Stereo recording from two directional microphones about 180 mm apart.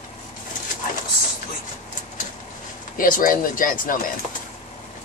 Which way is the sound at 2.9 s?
50° left (ahead or behind).